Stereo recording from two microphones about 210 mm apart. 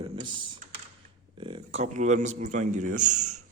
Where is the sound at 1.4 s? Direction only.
25° right (ahead or behind).